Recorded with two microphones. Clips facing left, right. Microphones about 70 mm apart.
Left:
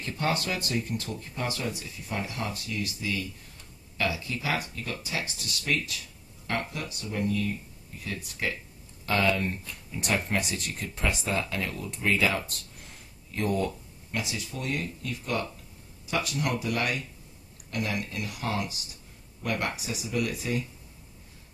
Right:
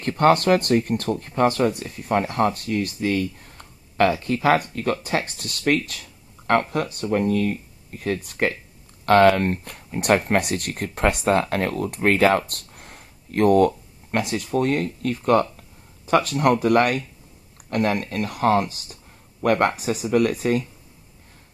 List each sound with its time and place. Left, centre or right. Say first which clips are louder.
0.0 s speech: right 12 dB; right
9.0 s speech: right 11 dB; right